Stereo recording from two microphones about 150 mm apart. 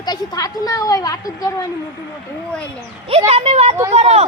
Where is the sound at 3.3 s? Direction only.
40° right (ahead or behind).